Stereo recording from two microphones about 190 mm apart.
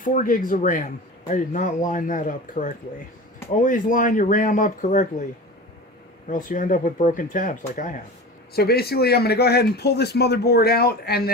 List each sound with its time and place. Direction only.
0.0 s speech: 45° left (ahead or behind)
8.5 s speech: 55° left (ahead or behind)